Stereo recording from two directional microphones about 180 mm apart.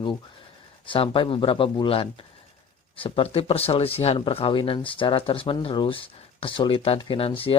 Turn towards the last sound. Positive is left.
turn(degrees=30)  # may be behind; listen again after turning